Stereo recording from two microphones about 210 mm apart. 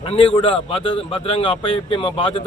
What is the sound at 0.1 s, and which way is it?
A man's voice, 25° left (ahead or behind).